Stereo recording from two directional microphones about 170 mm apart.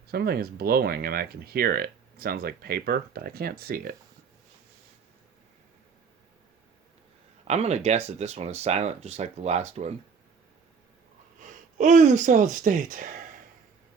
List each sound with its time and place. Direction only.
0.1 s speech: 65° right (ahead or behind)
7.4 s speech: 40° right (ahead or behind)
11.3 s speech: 45° right (ahead or behind)